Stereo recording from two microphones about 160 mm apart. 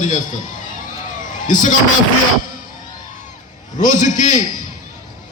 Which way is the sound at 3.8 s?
50° left (ahead or behind).